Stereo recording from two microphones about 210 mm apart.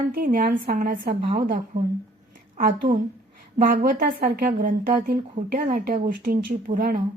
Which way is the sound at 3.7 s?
40° right (ahead or behind).